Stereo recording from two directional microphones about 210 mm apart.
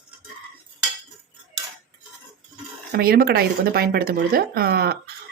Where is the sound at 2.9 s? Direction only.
45° right (ahead or behind).